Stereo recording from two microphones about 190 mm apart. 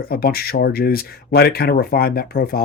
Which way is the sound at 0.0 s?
50° left (ahead or behind).